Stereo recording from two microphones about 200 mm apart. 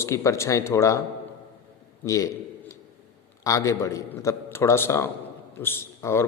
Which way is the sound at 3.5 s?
15° left (ahead or behind).